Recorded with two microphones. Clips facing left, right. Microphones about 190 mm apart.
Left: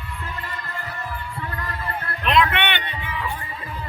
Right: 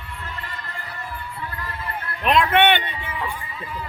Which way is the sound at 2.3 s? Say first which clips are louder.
Right 4 dB; 45° right (ahead or behind).